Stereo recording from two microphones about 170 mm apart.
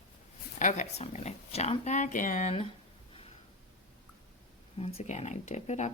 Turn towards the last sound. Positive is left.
turn(degrees=40)  # may be behind; listen again after turning